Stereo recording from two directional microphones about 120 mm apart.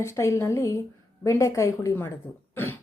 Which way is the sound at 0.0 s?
25° left (ahead or behind).